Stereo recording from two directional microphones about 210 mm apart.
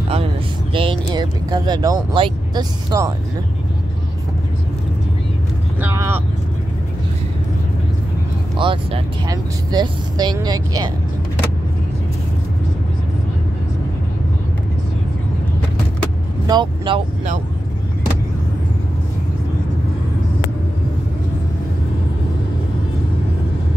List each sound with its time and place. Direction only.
0.7 s speech: 20° right (ahead or behind)
5.8 s speech: 10° right (ahead or behind)
8.5 s speech: 25° right (ahead or behind)
16.4 s speech: 20° right (ahead or behind)